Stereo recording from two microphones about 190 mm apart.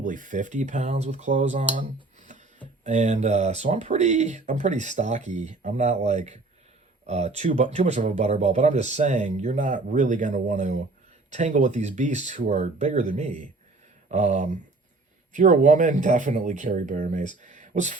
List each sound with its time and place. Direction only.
0.0 s speech: 45° right (ahead or behind)
2.8 s speech: 40° right (ahead or behind)